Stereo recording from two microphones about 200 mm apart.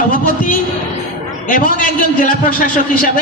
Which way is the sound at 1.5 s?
40° left (ahead or behind).